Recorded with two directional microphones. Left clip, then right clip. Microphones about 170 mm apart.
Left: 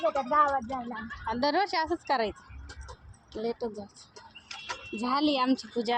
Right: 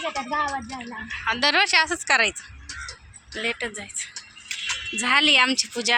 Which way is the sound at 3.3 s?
15° right (ahead or behind).